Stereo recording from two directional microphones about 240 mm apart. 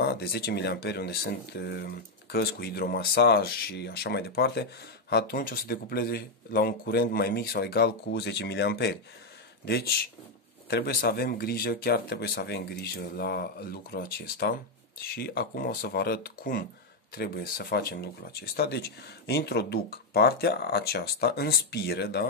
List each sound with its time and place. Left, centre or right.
0.0 s speech: left